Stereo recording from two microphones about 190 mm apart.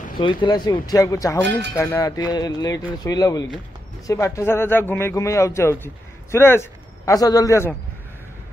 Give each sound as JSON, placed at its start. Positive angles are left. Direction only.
{"t": 0.2, "sound": "a man's voice", "side_deg": 25}